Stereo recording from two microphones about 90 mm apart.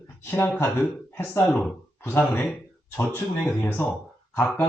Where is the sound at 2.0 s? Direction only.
25° left (ahead or behind).